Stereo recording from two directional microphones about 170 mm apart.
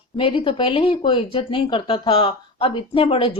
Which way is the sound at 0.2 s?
30° left (ahead or behind).